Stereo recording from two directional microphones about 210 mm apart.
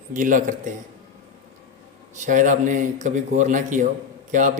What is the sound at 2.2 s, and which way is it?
A man's voice, 35° right (ahead or behind).